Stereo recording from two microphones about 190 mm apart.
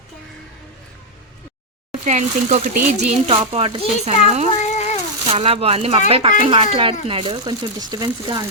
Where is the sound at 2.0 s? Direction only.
40° right (ahead or behind).